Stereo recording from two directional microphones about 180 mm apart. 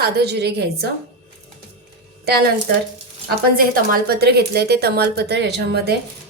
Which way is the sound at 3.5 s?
55° right (ahead or behind).